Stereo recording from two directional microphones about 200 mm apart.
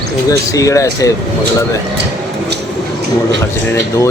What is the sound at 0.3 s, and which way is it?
Speech, 15° left (ahead or behind).